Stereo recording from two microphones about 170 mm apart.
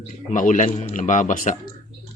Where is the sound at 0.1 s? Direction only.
50° left (ahead or behind).